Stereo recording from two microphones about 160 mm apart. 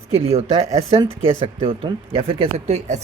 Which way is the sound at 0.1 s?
40° right (ahead or behind).